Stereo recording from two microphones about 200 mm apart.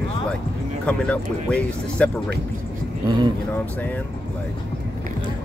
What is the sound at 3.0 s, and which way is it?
Speech, 20° right (ahead or behind).